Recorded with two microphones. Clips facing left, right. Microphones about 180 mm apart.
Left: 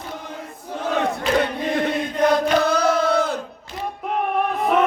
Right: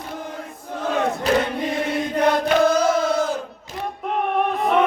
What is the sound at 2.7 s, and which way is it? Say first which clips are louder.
Battle cry: even; 65° left (ahead or behind).